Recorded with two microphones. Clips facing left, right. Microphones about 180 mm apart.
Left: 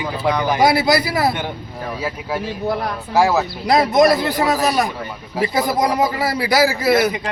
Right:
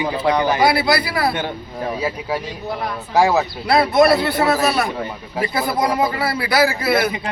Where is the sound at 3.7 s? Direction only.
15° left (ahead or behind).